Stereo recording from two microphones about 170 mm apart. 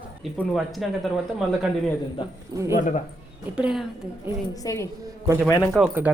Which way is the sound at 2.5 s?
20° right (ahead or behind).